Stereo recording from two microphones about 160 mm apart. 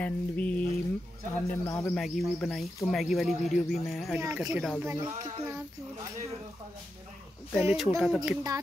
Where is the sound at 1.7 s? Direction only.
15° left (ahead or behind).